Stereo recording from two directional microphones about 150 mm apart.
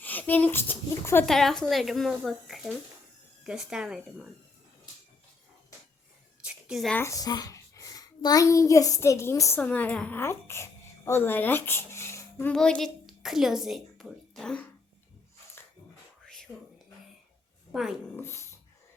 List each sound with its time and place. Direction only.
0.0 s a child's voice: 10° left (ahead or behind)
1.3 s speech: centre (ahead or behind)
6.4 s a sound: 5° right (ahead or behind)
6.9 s a child's voice: 20° left (ahead or behind)
12.5 s a woman's voice: 5° left (ahead or behind)
16.2 s whispering: 5° left (ahead or behind)
17.7 s speech: 5° right (ahead or behind)
18.2 s dog: 15° left (ahead or behind)